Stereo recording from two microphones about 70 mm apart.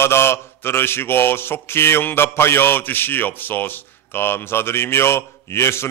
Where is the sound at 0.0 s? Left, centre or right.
Left.